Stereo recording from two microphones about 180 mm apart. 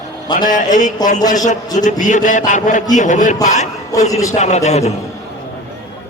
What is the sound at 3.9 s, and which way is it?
Speech, 20° left (ahead or behind).